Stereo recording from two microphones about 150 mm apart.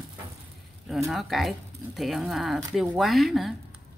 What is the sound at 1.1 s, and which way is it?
Speech, centre (ahead or behind).